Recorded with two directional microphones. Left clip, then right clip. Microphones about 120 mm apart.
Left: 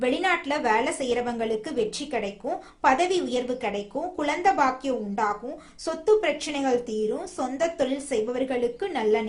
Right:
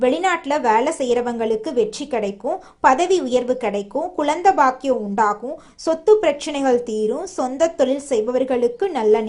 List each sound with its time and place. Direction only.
0.0 s speech: 35° right (ahead or behind)